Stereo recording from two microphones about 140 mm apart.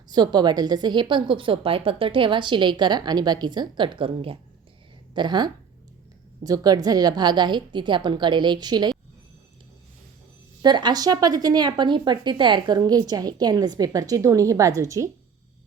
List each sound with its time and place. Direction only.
0.1 s a woman's voice: 30° right (ahead or behind)
10.6 s speech: 30° right (ahead or behind)